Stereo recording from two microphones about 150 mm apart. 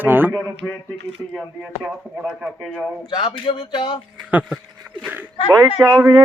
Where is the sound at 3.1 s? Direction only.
30° left (ahead or behind).